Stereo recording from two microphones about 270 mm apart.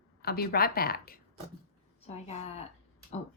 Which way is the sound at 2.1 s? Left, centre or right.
Left.